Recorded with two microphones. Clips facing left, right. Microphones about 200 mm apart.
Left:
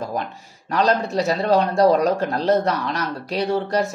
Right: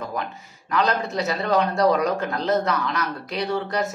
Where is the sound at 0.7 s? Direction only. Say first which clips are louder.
Left 4 dB; 30° left (ahead or behind).